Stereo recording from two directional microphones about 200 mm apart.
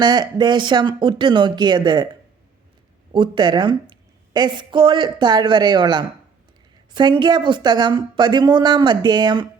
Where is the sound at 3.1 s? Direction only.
25° right (ahead or behind).